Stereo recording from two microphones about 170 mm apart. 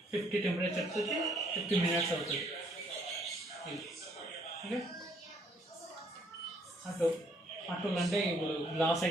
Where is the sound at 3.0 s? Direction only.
Centre (ahead or behind).